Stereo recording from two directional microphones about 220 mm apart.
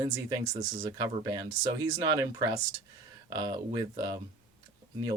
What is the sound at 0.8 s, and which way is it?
Speech, 15° right (ahead or behind).